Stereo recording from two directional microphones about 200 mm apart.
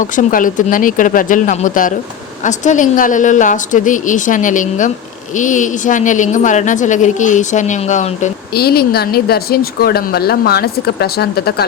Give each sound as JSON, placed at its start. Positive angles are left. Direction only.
{"t": 0.0, "sound": "a woman's voice", "side_deg": 40}
{"t": 8.5, "sound": "a woman's voice", "side_deg": 50}